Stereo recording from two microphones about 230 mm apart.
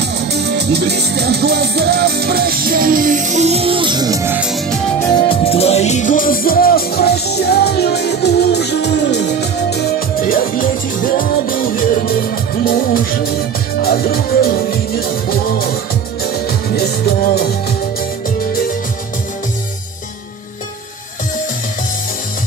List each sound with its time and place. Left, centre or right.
0.0 s music: right; by 5.1 s centre
5.1 s music: left